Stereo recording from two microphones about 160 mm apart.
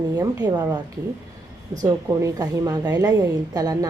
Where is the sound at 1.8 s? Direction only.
20° right (ahead or behind).